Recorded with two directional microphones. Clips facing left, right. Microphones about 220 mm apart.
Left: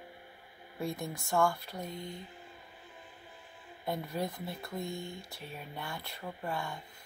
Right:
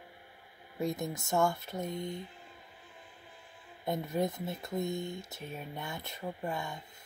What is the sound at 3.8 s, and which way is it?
Speech, 20° right (ahead or behind).